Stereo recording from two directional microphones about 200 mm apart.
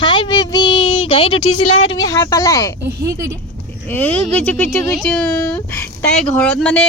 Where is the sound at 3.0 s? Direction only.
15° right (ahead or behind).